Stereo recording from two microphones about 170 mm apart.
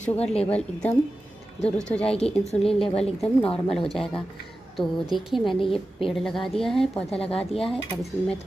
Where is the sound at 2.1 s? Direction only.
40° left (ahead or behind).